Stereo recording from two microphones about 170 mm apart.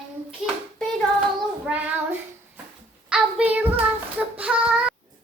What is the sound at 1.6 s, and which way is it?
Child singing, 10° right (ahead or behind).